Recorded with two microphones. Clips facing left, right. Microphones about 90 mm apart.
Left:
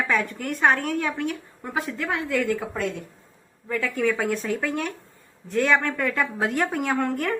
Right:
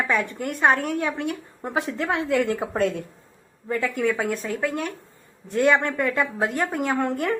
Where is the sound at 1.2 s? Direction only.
20° right (ahead or behind).